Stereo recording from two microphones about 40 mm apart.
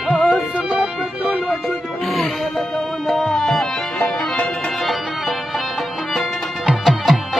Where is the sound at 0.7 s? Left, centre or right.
Centre.